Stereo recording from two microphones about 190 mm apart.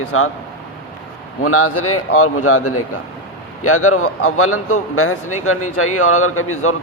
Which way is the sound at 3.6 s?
90° left.